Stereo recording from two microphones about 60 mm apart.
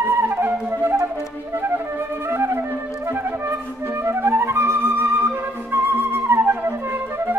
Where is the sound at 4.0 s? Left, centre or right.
Right.